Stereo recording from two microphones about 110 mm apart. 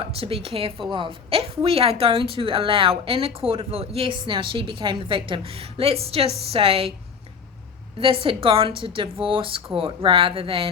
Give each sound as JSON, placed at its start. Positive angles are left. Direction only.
{"t": 0.0, "sound": "a woman's voice", "side_deg": -60}
{"t": 7.9, "sound": "a woman's voice", "side_deg": -55}